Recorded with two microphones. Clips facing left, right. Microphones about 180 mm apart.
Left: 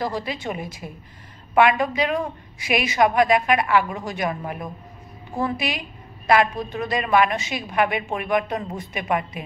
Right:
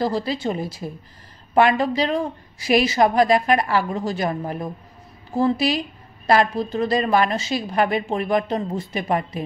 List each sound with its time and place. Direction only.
0.0 s a woman's voice: 30° right (ahead or behind)